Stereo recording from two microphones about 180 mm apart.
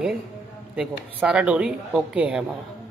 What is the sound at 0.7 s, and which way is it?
A woman's voice, 5° right (ahead or behind).